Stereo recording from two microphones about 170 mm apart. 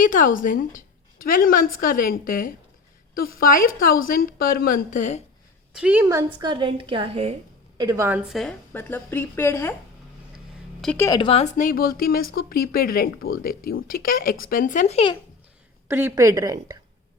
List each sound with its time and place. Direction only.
0.0 s a woman's voice: 50° left (ahead or behind)
5.7 s a woman's voice: 10° right (ahead or behind)
6.1 s a woman's voice: 25° right (ahead or behind)
7.8 s a woman's voice: 20° right (ahead or behind)
8.3 s a woman's voice: centre (ahead or behind)
10.9 s a woman's voice: 15° left (ahead or behind)
11.2 s speech: 35° left (ahead or behind)
15.9 s a woman's voice: 15° right (ahead or behind)